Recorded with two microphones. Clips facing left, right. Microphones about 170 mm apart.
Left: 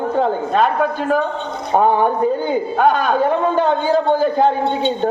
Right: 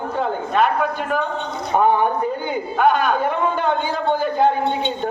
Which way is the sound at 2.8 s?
35° left (ahead or behind).